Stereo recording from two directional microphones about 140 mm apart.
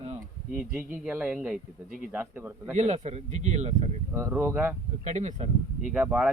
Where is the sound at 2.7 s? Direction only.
55° right (ahead or behind).